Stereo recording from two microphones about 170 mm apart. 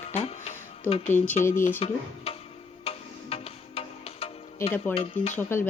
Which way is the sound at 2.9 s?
35° left (ahead or behind).